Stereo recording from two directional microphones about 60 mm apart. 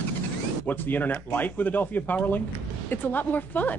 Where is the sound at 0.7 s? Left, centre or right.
Left.